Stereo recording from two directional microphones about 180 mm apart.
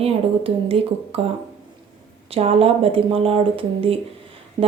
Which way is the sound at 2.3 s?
35° right (ahead or behind).